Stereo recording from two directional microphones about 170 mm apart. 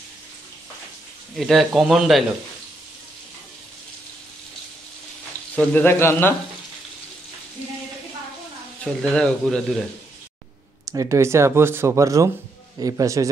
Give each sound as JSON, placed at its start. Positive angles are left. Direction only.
{"t": 1.3, "sound": "speech", "side_deg": 0}
{"t": 5.6, "sound": "speech", "side_deg": 10}
{"t": 8.8, "sound": "speech", "side_deg": 5}
{"t": 10.9, "sound": "a man's voice", "side_deg": -20}